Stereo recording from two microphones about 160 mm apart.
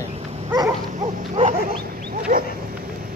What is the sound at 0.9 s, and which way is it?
Dog, 45° right (ahead or behind).